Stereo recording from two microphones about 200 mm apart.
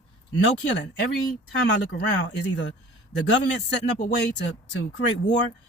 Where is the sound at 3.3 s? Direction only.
60° left (ahead or behind).